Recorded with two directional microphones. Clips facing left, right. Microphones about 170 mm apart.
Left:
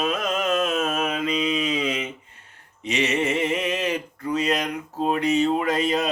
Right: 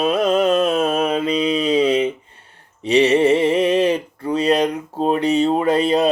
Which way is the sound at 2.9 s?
35° right (ahead or behind).